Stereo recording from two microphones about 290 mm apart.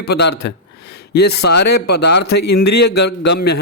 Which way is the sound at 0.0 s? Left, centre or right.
Left.